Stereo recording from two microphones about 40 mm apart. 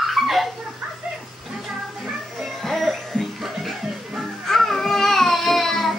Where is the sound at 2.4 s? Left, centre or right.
Centre.